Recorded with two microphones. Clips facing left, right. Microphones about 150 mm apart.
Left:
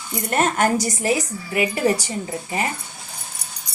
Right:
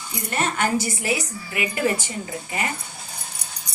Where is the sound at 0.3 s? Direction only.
45° left (ahead or behind).